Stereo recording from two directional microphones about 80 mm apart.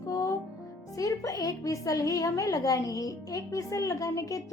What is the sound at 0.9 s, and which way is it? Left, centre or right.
A woman's voice, left.